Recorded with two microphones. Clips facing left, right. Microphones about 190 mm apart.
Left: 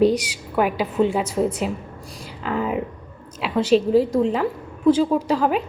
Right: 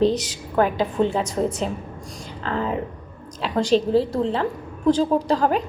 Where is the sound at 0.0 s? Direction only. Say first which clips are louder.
Left 2 dB; 10° left (ahead or behind).